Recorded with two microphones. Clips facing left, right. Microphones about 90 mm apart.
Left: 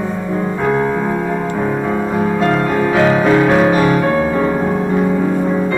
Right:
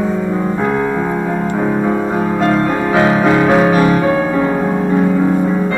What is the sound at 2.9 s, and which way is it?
Piano, 15° right (ahead or behind).